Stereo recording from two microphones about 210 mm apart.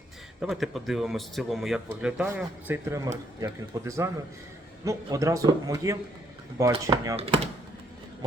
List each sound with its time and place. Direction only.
0.4 s a man's voice: centre (ahead or behind)